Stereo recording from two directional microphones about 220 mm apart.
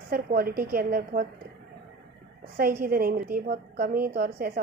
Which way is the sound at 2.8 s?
40° right (ahead or behind).